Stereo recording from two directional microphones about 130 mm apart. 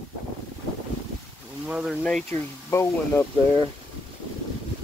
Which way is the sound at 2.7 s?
20° left (ahead or behind).